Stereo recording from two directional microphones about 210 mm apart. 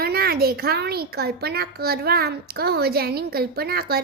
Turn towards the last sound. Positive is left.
turn(degrees=-45)  # may be behind; listen again after turning